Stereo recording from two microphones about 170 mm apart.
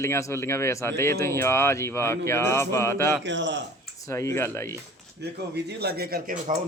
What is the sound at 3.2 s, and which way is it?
Speech, 90° right.